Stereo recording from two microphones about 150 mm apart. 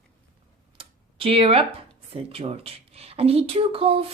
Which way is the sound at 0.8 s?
40° right (ahead or behind).